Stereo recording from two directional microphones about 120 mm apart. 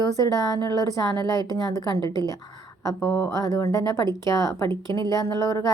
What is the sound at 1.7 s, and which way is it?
Speech, 35° left (ahead or behind).